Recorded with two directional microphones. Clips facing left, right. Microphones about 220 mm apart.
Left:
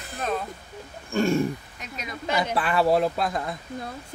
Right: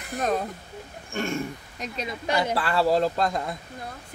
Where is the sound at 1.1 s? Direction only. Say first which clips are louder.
Left 6 dB; 35° left (ahead or behind).